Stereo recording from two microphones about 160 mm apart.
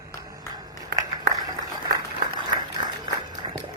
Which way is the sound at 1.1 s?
25° right (ahead or behind).